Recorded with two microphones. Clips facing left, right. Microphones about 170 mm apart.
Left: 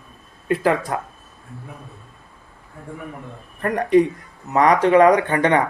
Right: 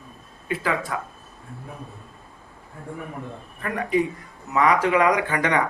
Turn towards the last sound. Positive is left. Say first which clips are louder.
# left 5 dB
turn(degrees=30)  # may be behind; listen again after turning